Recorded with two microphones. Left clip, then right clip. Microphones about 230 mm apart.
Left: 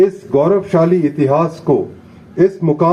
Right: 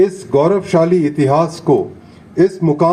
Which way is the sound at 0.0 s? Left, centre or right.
Right.